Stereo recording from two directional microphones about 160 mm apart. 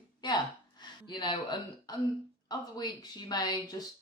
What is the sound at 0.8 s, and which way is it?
Speech, 30° left (ahead or behind).